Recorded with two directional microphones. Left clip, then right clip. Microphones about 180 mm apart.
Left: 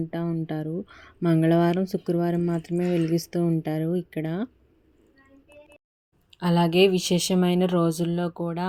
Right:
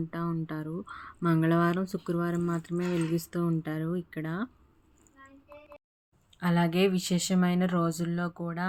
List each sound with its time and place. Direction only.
0.1 s speech: 20° left (ahead or behind)
6.3 s speech: 25° left (ahead or behind)